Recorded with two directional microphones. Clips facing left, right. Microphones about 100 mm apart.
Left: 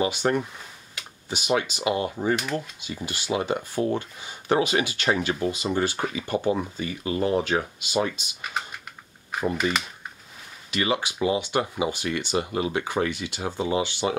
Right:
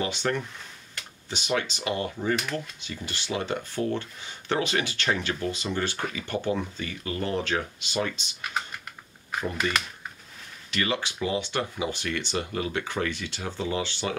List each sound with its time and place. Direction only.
0.0 s speech: 15° left (ahead or behind)
0.9 s a sound: 10° left (ahead or behind)
1.6 s speech: 10° left (ahead or behind)
2.3 s speech: 5° left (ahead or behind)
10.7 s speech: 15° left (ahead or behind)